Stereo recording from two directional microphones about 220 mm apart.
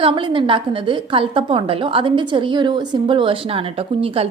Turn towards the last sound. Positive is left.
turn(degrees=-25)  # may be behind; listen again after turning